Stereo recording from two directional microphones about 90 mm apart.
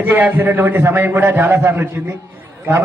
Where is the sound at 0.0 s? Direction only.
20° right (ahead or behind).